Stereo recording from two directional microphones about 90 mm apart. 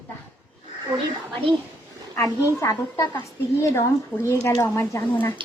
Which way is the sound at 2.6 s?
40° left (ahead or behind).